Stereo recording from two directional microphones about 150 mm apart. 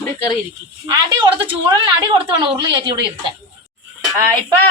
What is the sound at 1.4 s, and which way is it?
A woman's voice, 35° right (ahead or behind).